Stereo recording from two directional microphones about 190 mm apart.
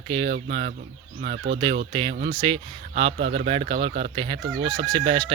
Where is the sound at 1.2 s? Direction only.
60° right (ahead or behind).